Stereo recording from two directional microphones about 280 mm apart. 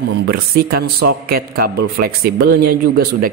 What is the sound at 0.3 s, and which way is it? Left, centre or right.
Speech, right.